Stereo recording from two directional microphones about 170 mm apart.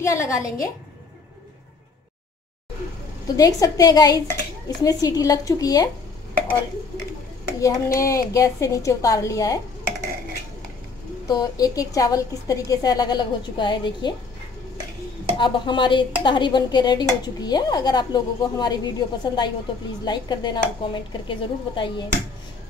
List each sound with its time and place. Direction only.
0.0 s a woman's voice: 15° left (ahead or behind)
3.3 s speech: 20° left (ahead or behind)
7.6 s speech: 20° left (ahead or behind)
11.2 s speech: 20° left (ahead or behind)
15.3 s speech: 30° left (ahead or behind)